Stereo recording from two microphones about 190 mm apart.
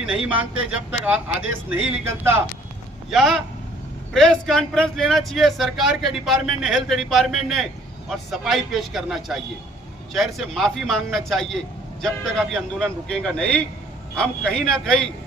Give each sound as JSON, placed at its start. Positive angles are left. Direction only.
{"t": 0.0, "sound": "speech", "side_deg": -5}
{"t": 3.1, "sound": "speech", "side_deg": 0}